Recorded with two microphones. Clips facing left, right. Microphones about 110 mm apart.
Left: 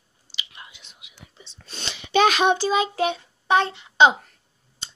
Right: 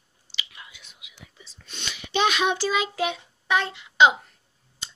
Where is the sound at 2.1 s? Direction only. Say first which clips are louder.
Left 5 dB; 45° left (ahead or behind).